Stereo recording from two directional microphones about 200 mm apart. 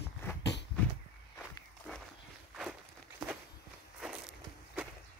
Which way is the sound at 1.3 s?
10° left (ahead or behind).